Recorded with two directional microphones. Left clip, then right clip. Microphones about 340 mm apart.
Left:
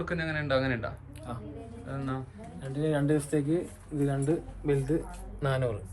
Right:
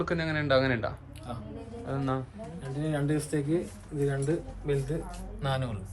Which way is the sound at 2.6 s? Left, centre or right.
Centre.